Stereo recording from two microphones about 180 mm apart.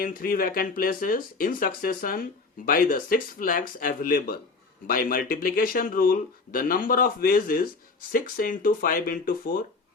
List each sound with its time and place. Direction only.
0.0 s speech: 50° left (ahead or behind)